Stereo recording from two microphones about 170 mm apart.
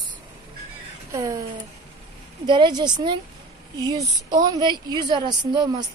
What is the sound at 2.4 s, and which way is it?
A woman's voice, 30° right (ahead or behind).